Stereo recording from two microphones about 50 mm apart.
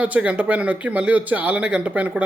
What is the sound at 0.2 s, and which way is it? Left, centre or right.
Speech, right.